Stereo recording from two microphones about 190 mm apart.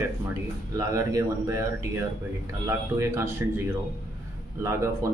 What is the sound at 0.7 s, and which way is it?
Speech, 15° right (ahead or behind).